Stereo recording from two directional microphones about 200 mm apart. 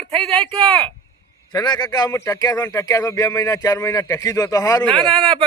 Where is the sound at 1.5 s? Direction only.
20° left (ahead or behind).